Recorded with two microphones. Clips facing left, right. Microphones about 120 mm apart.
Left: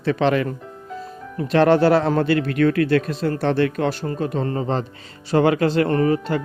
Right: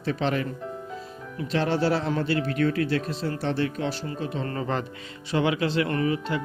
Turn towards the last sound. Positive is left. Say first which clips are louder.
# left 7 dB
turn(degrees=45)  # may be behind; listen again after turning